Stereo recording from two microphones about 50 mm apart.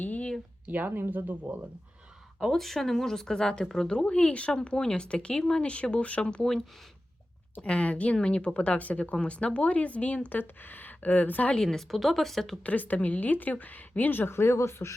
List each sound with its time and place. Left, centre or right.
0.0 s a sound: left
0.7 s speech: right
2.4 s speech: centre; by 6.4 s left
6.4 s speech: centre
7.5 s speech: left
10.2 s speech: left
11.5 s speech: centre
12.6 s speech: left